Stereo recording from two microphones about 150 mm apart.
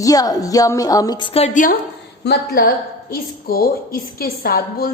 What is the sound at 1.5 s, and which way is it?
Speech, 60° left (ahead or behind).